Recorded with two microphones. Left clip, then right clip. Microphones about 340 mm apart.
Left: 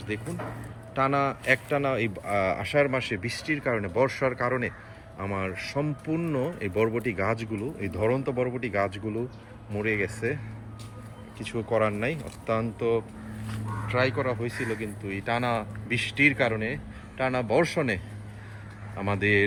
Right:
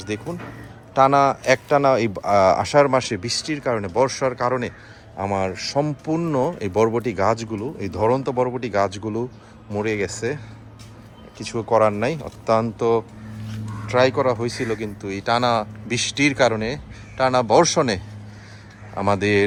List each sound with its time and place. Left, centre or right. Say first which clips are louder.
0.1 s a man's voice: right 4 dB; centre
9.9 s speech: right 2 dB; right
11.4 s a man's voice: right 8 dB; centre
14.6 s speech: right 6 dB; right
15.0 s a man's voice: right 9 dB; centre